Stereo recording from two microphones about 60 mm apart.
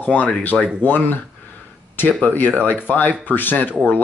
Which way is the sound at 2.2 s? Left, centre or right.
Left.